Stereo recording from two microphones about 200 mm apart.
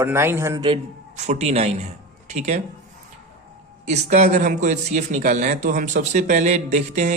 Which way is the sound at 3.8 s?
35° right (ahead or behind).